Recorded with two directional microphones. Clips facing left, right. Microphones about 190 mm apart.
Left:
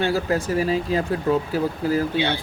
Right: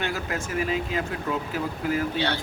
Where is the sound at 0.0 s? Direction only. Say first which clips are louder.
Left 8 dB; 35° left (ahead or behind).